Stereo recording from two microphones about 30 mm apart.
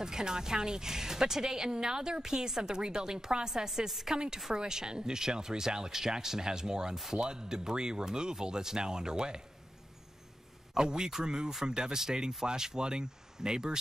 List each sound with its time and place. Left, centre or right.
0.0 s a woman's voice: right
10.7 s a woman's voice: right